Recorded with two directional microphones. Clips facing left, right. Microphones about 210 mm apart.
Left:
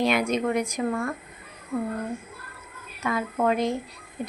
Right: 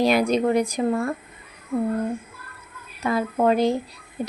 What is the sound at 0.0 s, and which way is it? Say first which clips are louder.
Speech: right 4 dB; 35° right (ahead or behind).